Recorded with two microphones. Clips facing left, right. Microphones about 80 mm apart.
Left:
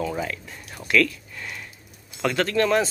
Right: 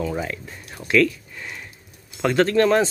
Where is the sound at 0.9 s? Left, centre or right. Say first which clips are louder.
Right 3 dB; right.